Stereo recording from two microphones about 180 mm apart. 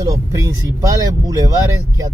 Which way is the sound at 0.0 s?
20° right (ahead or behind).